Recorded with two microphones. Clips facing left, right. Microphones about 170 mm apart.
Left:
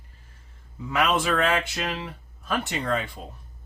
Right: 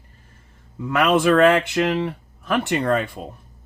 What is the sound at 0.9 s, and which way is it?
Speech, 55° right (ahead or behind).